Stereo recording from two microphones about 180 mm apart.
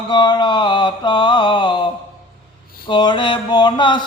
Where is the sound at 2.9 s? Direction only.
25° left (ahead or behind).